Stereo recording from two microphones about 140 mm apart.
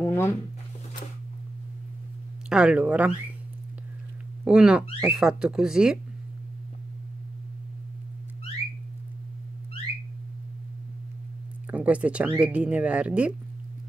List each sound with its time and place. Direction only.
0.0 s a sound: 15° left (ahead or behind)
2.5 s speech: 5° right (ahead or behind)
4.5 s speech: 5° right (ahead or behind)
11.7 s speech: 10° right (ahead or behind)